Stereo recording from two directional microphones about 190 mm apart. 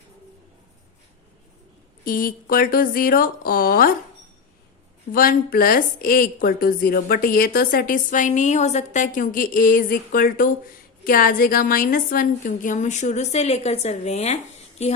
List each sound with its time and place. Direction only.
2.0 s a woman's voice: 45° left (ahead or behind)
5.1 s a woman's voice: 50° left (ahead or behind)